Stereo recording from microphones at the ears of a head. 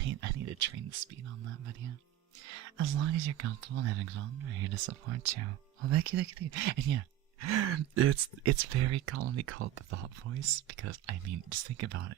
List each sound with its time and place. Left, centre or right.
0.0 s speech: right